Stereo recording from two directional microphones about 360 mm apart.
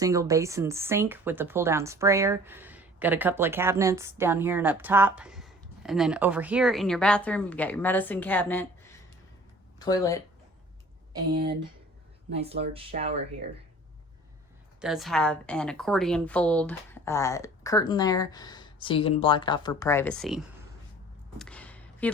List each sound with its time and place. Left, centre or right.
0.0 s speech: centre
12.3 s speech: centre
14.8 s a woman's voice: centre
21.3 s a sound: centre